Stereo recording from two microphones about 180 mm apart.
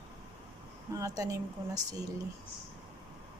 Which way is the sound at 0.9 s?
20° right (ahead or behind).